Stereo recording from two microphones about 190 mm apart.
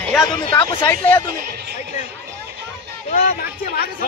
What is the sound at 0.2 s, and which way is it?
Speech, 20° left (ahead or behind).